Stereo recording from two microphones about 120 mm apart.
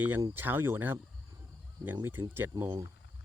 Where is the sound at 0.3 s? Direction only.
20° right (ahead or behind).